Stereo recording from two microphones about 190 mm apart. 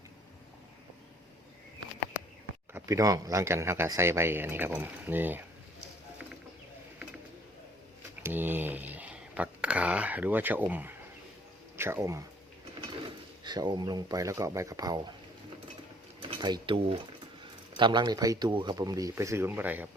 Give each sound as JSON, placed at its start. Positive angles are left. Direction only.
{"t": 2.7, "sound": "speech", "side_deg": -15}
{"t": 8.2, "sound": "a sound", "side_deg": -10}
{"t": 11.8, "sound": "speech", "side_deg": -15}
{"t": 13.4, "sound": "speech", "side_deg": -25}
{"t": 16.3, "sound": "speech", "side_deg": -25}